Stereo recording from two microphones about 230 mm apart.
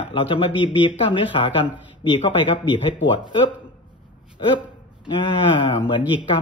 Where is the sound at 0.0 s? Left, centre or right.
Left.